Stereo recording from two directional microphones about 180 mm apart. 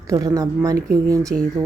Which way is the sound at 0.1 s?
20° right (ahead or behind).